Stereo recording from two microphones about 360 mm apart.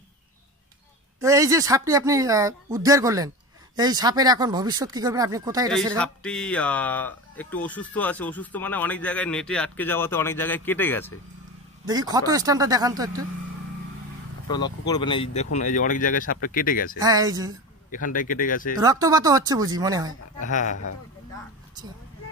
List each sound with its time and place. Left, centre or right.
1.2 s speech: centre
5.9 s speech: centre
11.8 s speech: centre
14.5 s speech: centre
17.0 s speech: centre
17.9 s speech: left
18.8 s speech: centre
20.3 s speech: left